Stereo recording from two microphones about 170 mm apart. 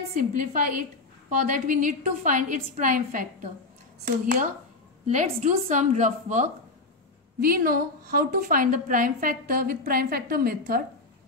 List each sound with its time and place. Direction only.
0.1 s a woman's voice: 50° right (ahead or behind)
5.0 s a woman's voice: 45° right (ahead or behind)
7.3 s a woman's voice: 60° right (ahead or behind)